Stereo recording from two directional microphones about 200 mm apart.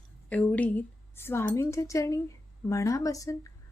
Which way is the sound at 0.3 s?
5° left (ahead or behind).